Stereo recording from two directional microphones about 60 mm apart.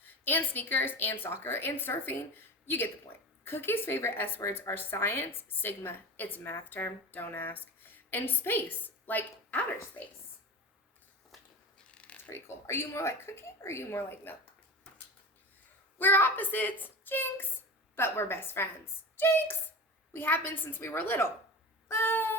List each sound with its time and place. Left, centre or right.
0.0 s speech: left
11.3 s a sound: centre
11.9 s mechanisms: centre
12.3 s speech: left
16.0 s speech: left